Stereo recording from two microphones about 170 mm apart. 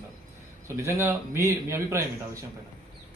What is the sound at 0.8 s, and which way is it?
Speech, 15° right (ahead or behind).